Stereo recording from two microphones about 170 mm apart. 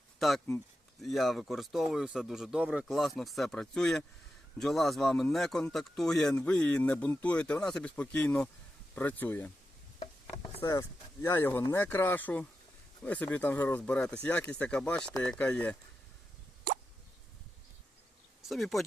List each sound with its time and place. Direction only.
0.2 s a man's voice: centre (ahead or behind)
10.0 s a sound: 35° left (ahead or behind)
10.6 s speech: 20° left (ahead or behind)
18.4 s a man's voice: centre (ahead or behind)